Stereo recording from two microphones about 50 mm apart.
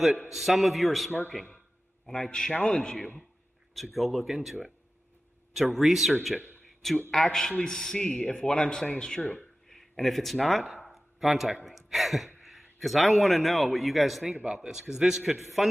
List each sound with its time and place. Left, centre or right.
0.3 s a man's voice: centre
3.7 s a man's voice: centre
8.2 s speech: left
9.7 s a sound: centre
11.6 s a man's voice: centre
14.4 s a man's voice: centre